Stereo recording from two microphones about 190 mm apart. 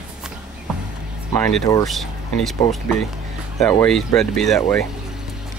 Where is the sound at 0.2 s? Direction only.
5° right (ahead or behind).